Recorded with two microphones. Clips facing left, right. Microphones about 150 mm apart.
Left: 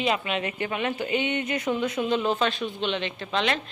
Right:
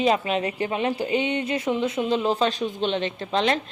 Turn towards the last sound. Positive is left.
turn(degrees=-40)  # may be behind; listen again after turning